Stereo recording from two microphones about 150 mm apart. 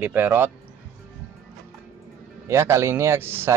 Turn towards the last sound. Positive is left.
turn(degrees=-15)  # may be behind; listen again after turning